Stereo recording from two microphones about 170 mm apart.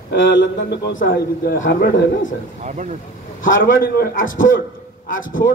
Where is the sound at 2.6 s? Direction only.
45° right (ahead or behind).